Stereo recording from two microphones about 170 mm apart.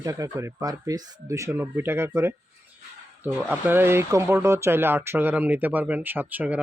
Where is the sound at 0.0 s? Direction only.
20° right (ahead or behind).